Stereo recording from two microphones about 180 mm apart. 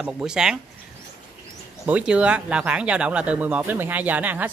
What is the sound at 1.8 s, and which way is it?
Speech, 5° right (ahead or behind).